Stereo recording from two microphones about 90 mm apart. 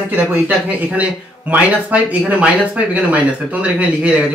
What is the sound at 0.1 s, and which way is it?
Speech, 20° right (ahead or behind).